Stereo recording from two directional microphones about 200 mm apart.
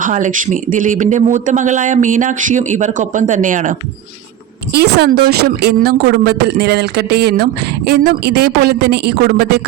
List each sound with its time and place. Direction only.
0.0 s speech: 40° right (ahead or behind)
4.7 s a woman's voice: 50° right (ahead or behind)